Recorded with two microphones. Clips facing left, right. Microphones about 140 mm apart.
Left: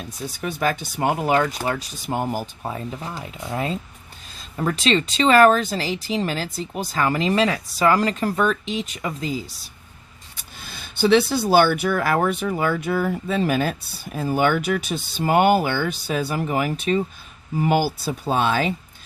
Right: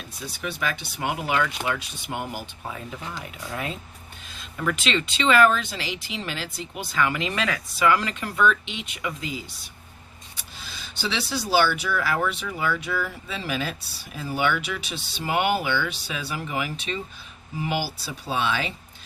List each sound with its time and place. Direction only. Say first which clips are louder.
0.3 s speech: left 6 dB; 40° left (ahead or behind)
10.6 s speech: left 11 dB; 55° left (ahead or behind)